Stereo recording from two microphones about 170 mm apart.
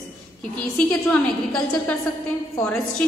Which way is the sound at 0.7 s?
5° left (ahead or behind).